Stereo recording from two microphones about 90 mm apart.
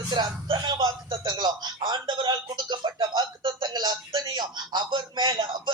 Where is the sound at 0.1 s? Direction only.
65° right (ahead or behind).